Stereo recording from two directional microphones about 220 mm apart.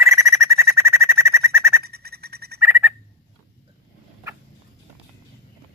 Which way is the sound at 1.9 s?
45° right (ahead or behind).